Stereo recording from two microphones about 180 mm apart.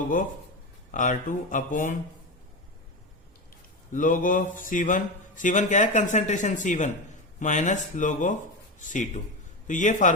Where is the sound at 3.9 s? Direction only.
50° left (ahead or behind).